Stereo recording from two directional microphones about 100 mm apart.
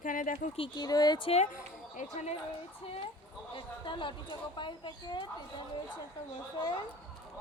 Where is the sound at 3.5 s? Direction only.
55° left (ahead or behind).